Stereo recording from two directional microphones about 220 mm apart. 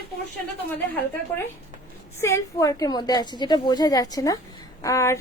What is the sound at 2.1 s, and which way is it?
A woman's voice, 10° left (ahead or behind).